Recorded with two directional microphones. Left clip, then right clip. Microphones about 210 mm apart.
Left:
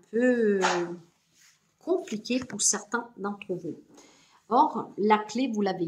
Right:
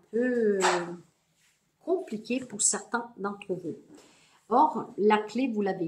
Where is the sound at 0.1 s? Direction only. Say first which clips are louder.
Left 2 dB; 40° left (ahead or behind).